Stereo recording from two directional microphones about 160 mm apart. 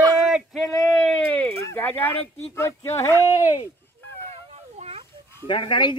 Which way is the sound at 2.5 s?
15° left (ahead or behind).